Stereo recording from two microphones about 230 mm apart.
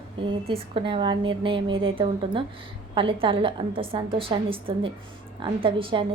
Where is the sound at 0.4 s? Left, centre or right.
Right.